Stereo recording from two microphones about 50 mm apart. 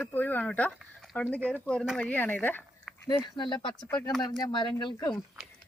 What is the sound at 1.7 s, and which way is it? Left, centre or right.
Speech, centre.